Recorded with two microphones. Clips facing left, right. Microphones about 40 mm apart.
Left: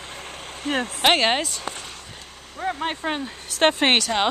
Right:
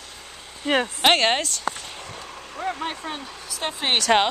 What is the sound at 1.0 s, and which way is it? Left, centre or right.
Speech, centre.